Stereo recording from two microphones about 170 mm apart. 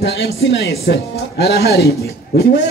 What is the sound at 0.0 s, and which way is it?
A woman's voice, 75° left (ahead or behind).